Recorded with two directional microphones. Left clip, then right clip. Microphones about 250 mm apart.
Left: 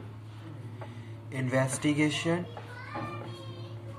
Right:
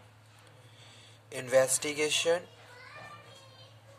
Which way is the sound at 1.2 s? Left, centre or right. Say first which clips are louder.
Right 4 dB; right.